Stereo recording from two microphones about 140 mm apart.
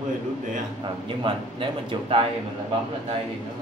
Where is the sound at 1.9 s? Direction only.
40° right (ahead or behind).